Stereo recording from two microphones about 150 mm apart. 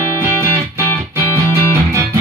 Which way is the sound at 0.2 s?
20° right (ahead or behind).